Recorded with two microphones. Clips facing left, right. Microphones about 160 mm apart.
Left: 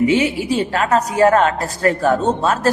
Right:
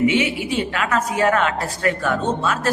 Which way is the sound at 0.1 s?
35° left (ahead or behind).